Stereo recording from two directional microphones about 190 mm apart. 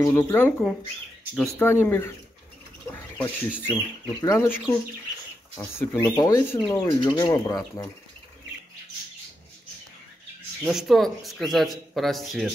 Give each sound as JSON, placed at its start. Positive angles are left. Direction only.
{"t": 0.0, "sound": "speech", "side_deg": 10}
{"t": 10.6, "sound": "speech", "side_deg": 0}